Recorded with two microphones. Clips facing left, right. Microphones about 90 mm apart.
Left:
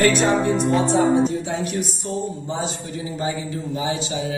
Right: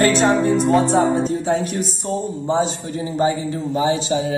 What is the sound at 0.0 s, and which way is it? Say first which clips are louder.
Speech: right 2 dB; 30° right (ahead or behind).